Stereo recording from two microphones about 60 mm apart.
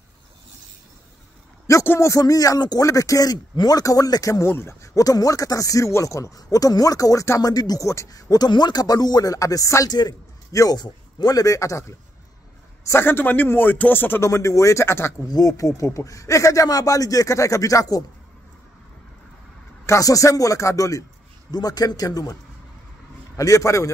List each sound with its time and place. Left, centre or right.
1.7 s a sound: left
2.1 s speech: left
4.5 s speech: left
4.8 s a man's voice: left
12.8 s speech: left
14.2 s a man's voice: left
15.2 s speech: left
20.0 s speech: left
21.5 s speech: left
23.3 s a man's voice: left